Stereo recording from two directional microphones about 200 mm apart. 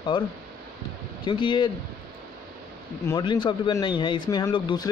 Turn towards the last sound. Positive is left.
turn(degrees=20)  # may be behind; listen again after turning